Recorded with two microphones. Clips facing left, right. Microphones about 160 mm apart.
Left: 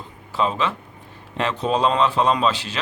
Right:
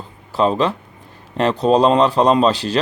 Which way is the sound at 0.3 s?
35° right (ahead or behind).